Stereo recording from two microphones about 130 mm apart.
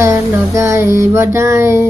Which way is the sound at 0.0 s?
20° right (ahead or behind).